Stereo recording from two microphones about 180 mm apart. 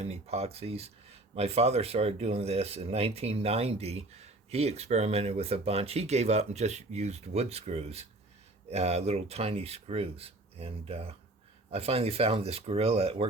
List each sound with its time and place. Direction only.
0.0 s speech: 35° right (ahead or behind)